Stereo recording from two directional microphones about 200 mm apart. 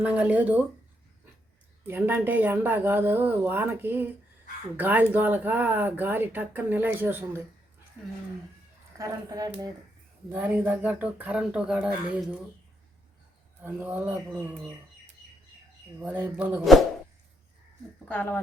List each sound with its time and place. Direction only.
0.0 s speech: 10° right (ahead or behind)
1.9 s speech: 10° right (ahead or behind)
9.0 s speech: 15° right (ahead or behind)
13.7 s speech: 10° right (ahead or behind)
16.0 s speech: 10° right (ahead or behind)
18.1 s speech: 10° left (ahead or behind)